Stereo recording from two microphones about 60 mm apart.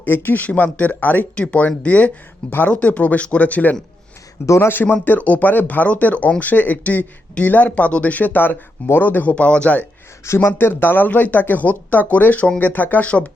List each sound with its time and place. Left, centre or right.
0.0 s speech: left
4.4 s speech: left
4.7 s speech: left
9.3 s speech: centre
10.2 s speech: left